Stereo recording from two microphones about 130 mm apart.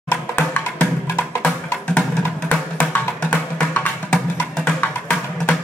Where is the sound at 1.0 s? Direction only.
20° left (ahead or behind).